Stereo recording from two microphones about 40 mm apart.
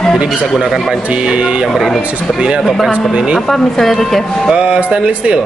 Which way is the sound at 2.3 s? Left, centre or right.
Centre.